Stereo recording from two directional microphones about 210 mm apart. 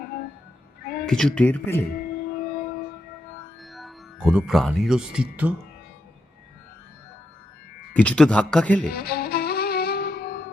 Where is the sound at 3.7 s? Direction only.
Centre (ahead or behind).